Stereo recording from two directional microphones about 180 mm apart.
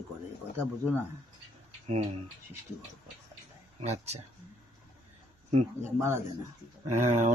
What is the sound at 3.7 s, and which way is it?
Speech, 35° right (ahead or behind).